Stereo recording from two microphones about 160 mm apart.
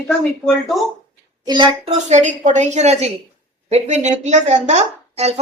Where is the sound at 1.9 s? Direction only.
50° right (ahead or behind).